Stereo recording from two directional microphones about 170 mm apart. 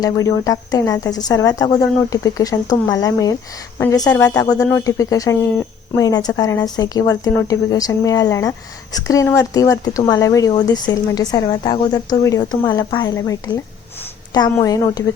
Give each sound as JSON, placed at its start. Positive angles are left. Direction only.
{"t": 0.0, "sound": "speech", "side_deg": 20}